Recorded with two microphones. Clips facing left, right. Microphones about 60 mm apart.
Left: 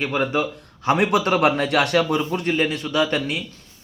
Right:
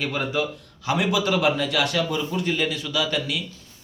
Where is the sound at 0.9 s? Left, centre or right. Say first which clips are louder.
Left 4 dB; left.